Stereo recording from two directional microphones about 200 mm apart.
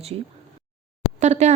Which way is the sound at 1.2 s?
35° right (ahead or behind).